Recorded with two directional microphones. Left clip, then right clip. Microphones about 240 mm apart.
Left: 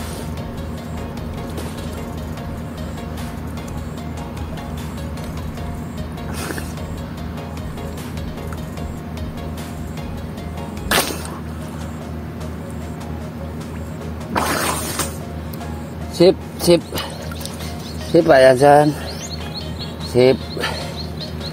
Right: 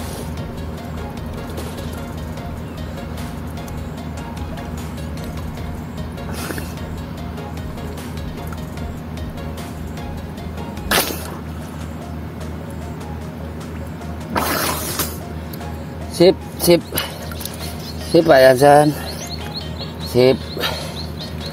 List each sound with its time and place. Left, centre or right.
10.9 s music: centre
14.3 s music: centre
16.2 s speech: centre
18.1 s speech: centre
20.2 s music: centre